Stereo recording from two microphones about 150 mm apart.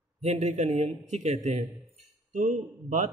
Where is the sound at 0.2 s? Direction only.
45° right (ahead or behind).